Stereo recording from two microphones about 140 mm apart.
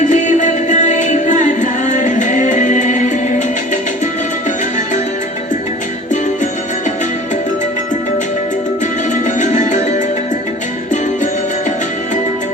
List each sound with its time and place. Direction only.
0.0 s music: 60° left (ahead or behind)
9.4 s music: 60° left (ahead or behind)